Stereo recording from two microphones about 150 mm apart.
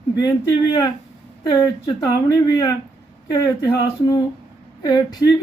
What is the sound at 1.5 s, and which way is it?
Speech, 25° left (ahead or behind).